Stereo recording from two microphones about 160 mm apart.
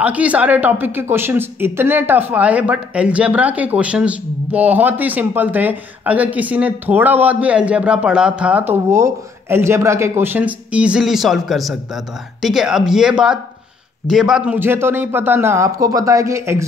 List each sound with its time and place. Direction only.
0.0 s a woman's voice: 10° right (ahead or behind)